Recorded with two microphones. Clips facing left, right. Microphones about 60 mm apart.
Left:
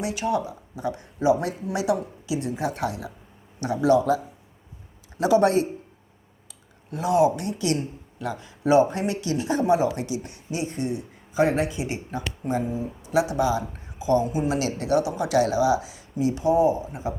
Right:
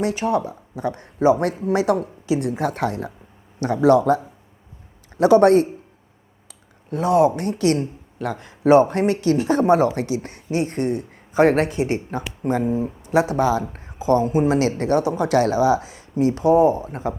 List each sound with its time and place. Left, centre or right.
0.0 s speech: right
5.2 s speech: right
6.9 s speech: right
8.2 s speech: right